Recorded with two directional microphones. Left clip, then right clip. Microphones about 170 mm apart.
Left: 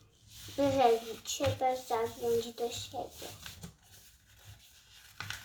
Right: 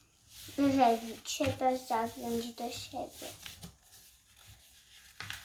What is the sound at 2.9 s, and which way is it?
Speech, 30° right (ahead or behind).